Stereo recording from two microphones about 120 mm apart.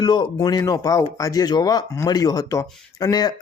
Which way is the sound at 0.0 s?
35° left (ahead or behind).